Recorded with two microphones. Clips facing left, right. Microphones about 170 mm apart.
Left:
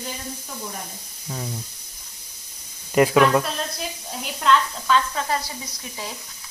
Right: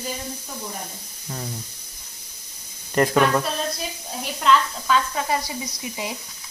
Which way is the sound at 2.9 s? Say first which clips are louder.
Left 2 dB; 5° left (ahead or behind).